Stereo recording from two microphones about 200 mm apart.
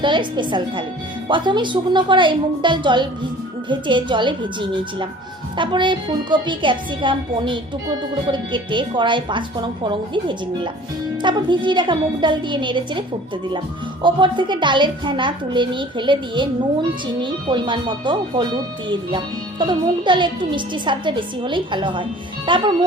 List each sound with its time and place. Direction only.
0.0 s speech: 25° right (ahead or behind)